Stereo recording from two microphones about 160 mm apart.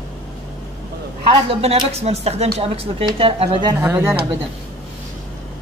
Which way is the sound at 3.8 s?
15° right (ahead or behind).